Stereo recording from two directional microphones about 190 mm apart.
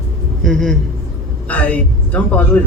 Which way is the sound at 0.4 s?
Centre (ahead or behind).